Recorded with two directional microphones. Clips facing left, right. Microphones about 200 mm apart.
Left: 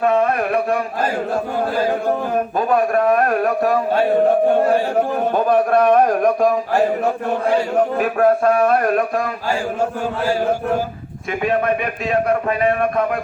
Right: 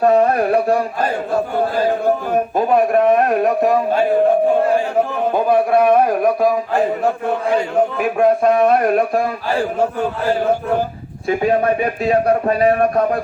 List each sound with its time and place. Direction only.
0.0 s a man's voice: 35° right (ahead or behind)
2.6 s a man's voice: 25° right (ahead or behind)
5.3 s a man's voice: 10° right (ahead or behind)
8.2 s a man's voice: 20° right (ahead or behind)
11.3 s a man's voice: 35° right (ahead or behind)